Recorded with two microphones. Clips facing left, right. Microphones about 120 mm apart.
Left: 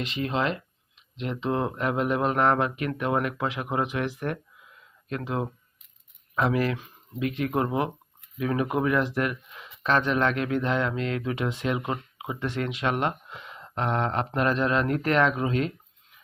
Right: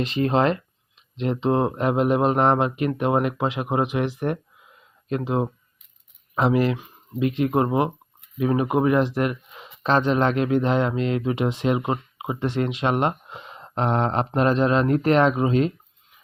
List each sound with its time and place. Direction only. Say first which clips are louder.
0.0 s speech: right 7 dB; 40° right (ahead or behind)
1.1 s speech: right 6 dB; 30° right (ahead or behind)